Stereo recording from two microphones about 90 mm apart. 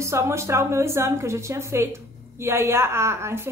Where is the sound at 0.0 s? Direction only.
30° right (ahead or behind).